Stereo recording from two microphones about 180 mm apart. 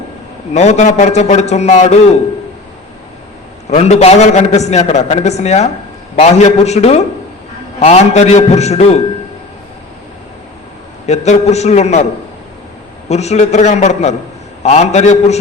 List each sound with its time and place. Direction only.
0.5 s a man's voice: 40° left (ahead or behind)
3.7 s a man's voice: 35° left (ahead or behind)
11.0 s a man's voice: 35° left (ahead or behind)
13.1 s a man's voice: 40° left (ahead or behind)